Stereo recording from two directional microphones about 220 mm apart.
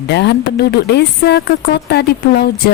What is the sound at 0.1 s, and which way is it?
Speech, 50° left (ahead or behind).